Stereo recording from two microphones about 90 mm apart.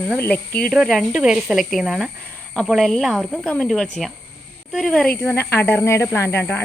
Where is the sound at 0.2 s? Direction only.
20° left (ahead or behind).